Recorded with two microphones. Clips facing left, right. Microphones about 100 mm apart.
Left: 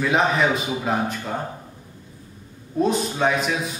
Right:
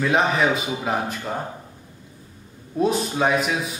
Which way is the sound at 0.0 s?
Centre (ahead or behind).